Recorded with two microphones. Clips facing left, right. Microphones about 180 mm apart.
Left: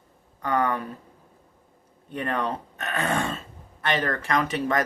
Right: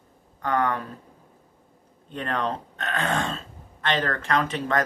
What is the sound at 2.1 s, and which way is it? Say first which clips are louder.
Speech: even; 10° left (ahead or behind).